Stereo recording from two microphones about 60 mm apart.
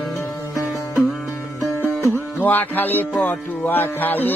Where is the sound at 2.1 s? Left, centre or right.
Left.